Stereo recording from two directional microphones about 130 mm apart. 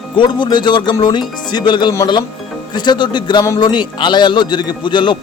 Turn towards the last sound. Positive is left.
turn(degrees=35)  # may be behind; listen again after turning